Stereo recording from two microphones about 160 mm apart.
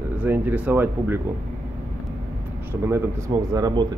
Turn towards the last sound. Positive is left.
turn(degrees=-25)  # may be behind; listen again after turning